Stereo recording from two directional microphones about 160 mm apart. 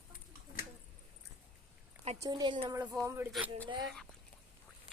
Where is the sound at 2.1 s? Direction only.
25° right (ahead or behind).